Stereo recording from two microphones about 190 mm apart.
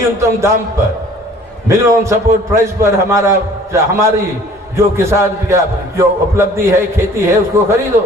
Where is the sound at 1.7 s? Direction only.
15° right (ahead or behind).